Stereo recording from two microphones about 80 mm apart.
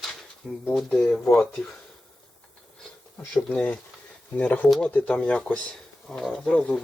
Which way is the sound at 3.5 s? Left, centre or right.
Centre.